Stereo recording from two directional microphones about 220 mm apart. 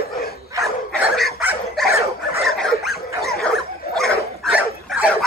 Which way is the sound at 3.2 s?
Centre (ahead or behind).